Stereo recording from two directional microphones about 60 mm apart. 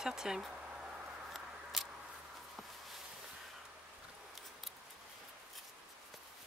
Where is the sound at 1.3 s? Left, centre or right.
Centre.